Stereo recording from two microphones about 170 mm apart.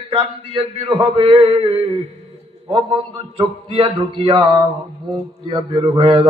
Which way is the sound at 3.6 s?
30° right (ahead or behind).